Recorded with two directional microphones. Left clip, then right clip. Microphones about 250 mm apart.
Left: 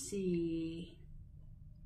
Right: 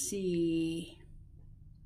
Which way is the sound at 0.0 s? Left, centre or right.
Right.